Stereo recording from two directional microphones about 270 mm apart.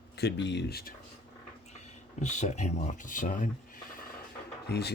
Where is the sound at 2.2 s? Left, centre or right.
Left.